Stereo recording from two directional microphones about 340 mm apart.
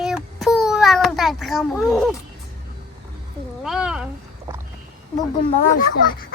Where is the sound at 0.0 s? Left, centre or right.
Centre.